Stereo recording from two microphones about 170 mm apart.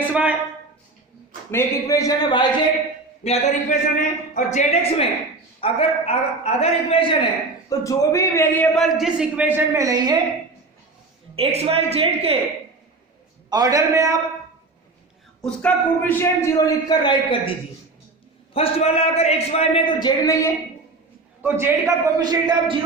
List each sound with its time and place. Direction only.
0.1 s a woman's voice: 10° right (ahead or behind)
1.5 s speech: 15° left (ahead or behind)
3.2 s a man's voice: 45° left (ahead or behind)
7.7 s a man's voice: 20° left (ahead or behind); by 10.2 s 20° right (ahead or behind)
11.3 s a woman's voice: 35° right (ahead or behind)
13.5 s a man's voice: 20° right (ahead or behind)
15.4 s a man's voice: 5° left (ahead or behind); by 17.5 s 25° left (ahead or behind)
18.5 s a man's voice: 35° left (ahead or behind); by 20.5 s 20° left (ahead or behind)
21.4 s a man's voice: 15° right (ahead or behind)